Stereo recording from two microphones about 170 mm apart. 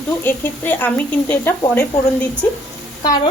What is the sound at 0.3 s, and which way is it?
A woman's voice, 10° left (ahead or behind).